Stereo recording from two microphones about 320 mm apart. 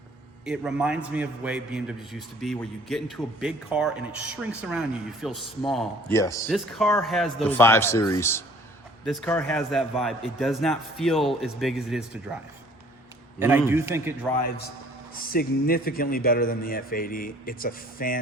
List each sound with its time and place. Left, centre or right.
0.4 s a man's voice: centre
13.4 s a man's voice: centre
15.1 s a man's voice: left